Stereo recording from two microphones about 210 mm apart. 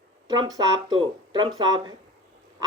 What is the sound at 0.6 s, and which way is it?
Speech, 20° right (ahead or behind).